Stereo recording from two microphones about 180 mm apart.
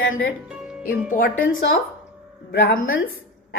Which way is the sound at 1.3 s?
90° left.